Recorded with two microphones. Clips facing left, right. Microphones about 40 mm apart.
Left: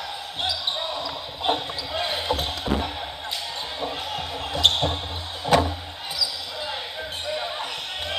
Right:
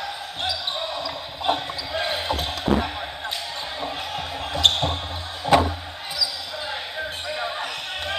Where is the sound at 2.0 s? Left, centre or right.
Right.